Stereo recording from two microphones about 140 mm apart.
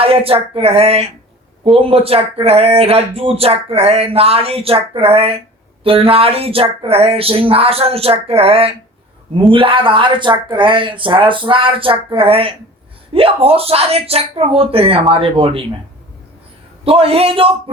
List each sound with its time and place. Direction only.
0.0 s speech: 45° right (ahead or behind)
16.8 s speech: 45° right (ahead or behind)